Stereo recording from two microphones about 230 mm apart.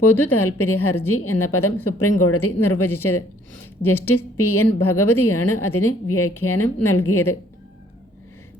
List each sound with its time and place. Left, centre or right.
0.1 s a woman's voice: centre
0.3 s a woman's voice: left